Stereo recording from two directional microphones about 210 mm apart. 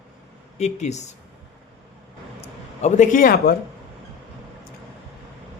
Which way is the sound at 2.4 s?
35° left (ahead or behind).